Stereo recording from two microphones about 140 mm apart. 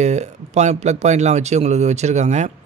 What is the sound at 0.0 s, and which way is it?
Speech, 55° right (ahead or behind).